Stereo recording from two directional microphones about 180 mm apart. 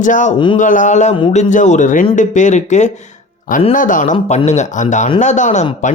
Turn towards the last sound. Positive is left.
turn(degrees=40)  # may be behind; listen again after turning